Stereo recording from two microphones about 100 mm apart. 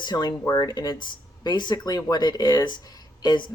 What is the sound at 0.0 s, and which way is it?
Speech, 45° left (ahead or behind).